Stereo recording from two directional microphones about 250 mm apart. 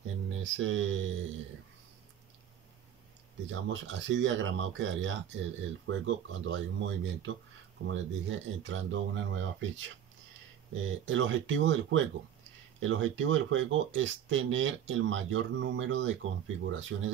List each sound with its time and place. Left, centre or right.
0.4 s speech: right
3.4 s speech: right
11.1 s speech: right